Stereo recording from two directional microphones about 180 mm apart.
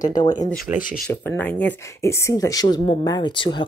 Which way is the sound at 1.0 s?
15° left (ahead or behind).